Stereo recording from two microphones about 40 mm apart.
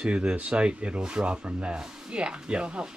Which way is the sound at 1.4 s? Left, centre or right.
Right.